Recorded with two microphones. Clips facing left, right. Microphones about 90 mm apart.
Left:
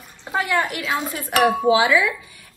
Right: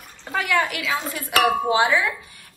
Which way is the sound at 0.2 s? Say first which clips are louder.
Left 2 dB; 20° left (ahead or behind).